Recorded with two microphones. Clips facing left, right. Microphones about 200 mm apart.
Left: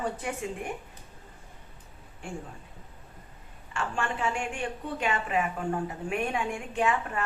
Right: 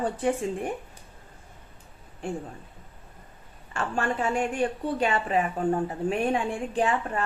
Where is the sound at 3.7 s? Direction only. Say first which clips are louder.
Right 4 dB; 40° right (ahead or behind).